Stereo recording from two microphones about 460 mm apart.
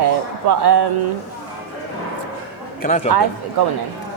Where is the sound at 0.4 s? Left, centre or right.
Right.